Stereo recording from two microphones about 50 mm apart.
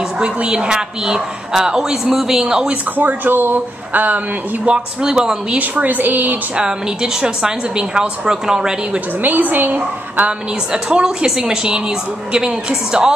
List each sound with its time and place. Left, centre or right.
0.2 s a woman's voice: right
3.0 s speech: right
4.6 s a woman's voice: centre
5.6 s speech: right
6.5 s a woman's voice: centre
9.2 s speech: right
10.7 s a woman's voice: centre